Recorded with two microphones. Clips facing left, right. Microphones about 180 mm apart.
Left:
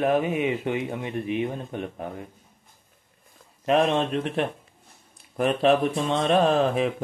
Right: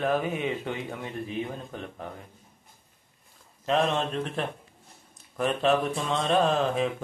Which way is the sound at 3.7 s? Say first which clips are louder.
Left 4 dB; 30° left (ahead or behind).